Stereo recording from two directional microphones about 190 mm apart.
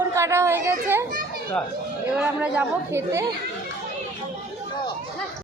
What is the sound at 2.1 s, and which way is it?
A woman's voice, 5° right (ahead or behind).